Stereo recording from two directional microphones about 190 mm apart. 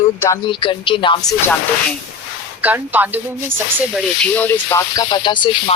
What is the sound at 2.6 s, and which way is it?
A woman's voice, 10° right (ahead or behind).